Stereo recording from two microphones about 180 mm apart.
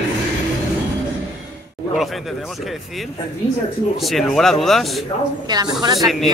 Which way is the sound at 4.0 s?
Centre (ahead or behind).